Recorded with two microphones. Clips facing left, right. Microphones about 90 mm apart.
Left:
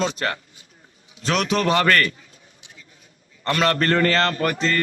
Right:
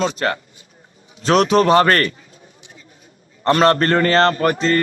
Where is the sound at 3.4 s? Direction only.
35° right (ahead or behind).